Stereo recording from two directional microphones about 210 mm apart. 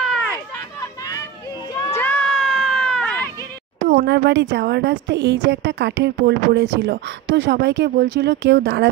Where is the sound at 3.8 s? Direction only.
50° right (ahead or behind).